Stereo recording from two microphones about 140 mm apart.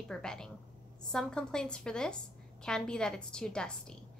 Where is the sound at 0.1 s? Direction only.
5° left (ahead or behind).